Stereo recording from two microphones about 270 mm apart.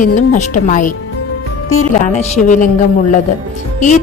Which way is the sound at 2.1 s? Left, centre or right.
Left.